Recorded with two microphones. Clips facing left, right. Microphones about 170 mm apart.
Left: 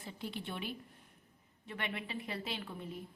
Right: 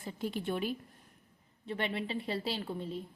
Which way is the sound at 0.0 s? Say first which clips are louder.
Right 7 dB; 45° right (ahead or behind).